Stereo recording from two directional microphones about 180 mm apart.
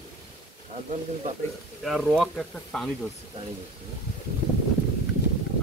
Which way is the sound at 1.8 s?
Centre (ahead or behind).